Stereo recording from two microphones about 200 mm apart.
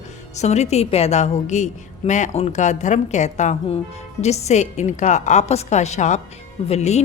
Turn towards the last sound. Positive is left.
turn(degrees=35)  # may be behind; listen again after turning